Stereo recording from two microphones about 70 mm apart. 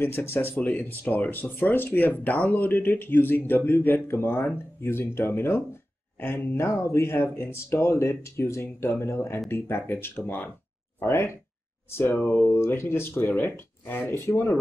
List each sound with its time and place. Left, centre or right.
0.0 s speech: left
11.1 s speech: left